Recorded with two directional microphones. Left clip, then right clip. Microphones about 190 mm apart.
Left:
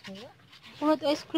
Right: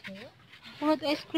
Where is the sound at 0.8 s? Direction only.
15° left (ahead or behind).